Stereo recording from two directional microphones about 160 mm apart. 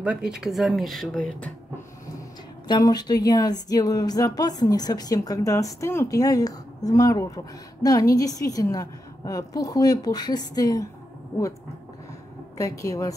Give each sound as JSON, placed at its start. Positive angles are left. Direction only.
{"t": 0.0, "sound": "speech", "side_deg": -5}
{"t": 2.7, "sound": "speech", "side_deg": 25}
{"t": 12.5, "sound": "speech", "side_deg": 20}